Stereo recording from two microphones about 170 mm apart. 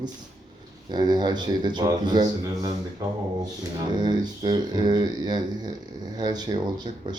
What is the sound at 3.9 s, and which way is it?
Speech, 25° right (ahead or behind).